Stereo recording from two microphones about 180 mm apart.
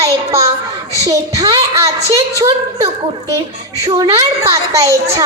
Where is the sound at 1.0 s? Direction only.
20° right (ahead or behind).